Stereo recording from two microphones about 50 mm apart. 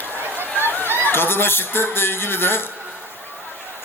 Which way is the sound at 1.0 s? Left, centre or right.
Left.